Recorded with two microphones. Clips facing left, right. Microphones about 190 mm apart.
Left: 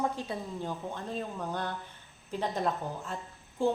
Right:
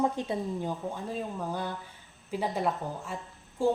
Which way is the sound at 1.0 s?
10° right (ahead or behind).